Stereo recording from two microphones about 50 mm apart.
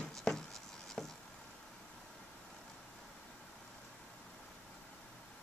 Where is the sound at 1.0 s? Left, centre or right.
Centre.